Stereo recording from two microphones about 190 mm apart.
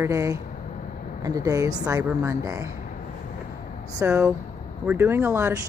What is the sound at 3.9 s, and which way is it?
A woman's voice, 15° right (ahead or behind).